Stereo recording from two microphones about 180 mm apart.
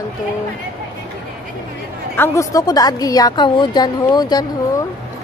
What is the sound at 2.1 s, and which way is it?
A woman's voice, 20° left (ahead or behind).